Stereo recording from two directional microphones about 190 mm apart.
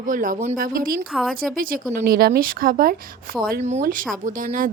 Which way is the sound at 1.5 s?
50° right (ahead or behind).